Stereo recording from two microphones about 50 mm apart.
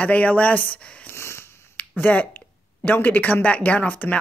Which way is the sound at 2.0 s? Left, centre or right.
Left.